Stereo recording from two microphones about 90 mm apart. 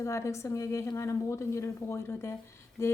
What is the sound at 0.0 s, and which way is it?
Speech, 30° left (ahead or behind).